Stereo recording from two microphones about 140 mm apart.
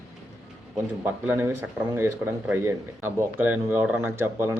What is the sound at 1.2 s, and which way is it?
Speech, 15° right (ahead or behind).